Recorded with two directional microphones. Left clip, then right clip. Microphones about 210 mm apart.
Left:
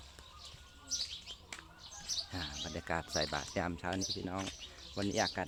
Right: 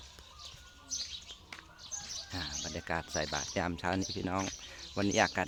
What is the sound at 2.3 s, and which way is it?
Speech, 10° right (ahead or behind).